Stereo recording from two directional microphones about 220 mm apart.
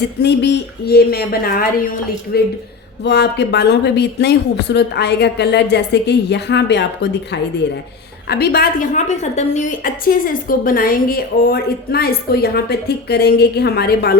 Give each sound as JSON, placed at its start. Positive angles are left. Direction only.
{"t": 0.2, "sound": "a woman's voice", "side_deg": 50}